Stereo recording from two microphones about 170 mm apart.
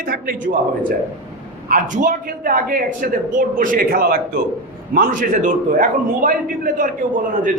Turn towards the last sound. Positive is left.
turn(degrees=-50)  # may be behind; listen again after turning